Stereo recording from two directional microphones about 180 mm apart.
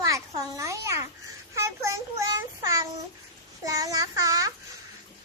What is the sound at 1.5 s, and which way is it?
Child singing, 15° right (ahead or behind).